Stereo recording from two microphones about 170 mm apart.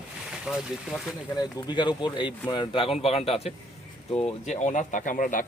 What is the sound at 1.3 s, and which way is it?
Speech, 25° left (ahead or behind).